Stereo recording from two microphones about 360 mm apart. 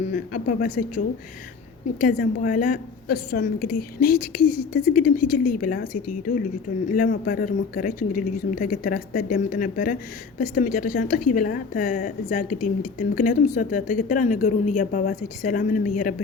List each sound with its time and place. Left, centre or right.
0.1 s a woman's voice: left